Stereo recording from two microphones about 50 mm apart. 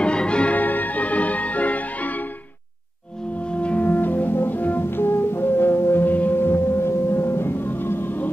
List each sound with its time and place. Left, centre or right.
0.0 s music: centre
0.6 s music: left
3.5 s music: left
3.8 s music: left
6.3 s music: left